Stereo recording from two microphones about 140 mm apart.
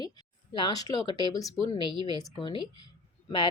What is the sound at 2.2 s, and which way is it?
Speech, 35° left (ahead or behind).